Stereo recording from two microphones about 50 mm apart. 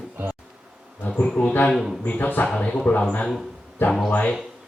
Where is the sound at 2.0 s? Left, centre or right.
Left.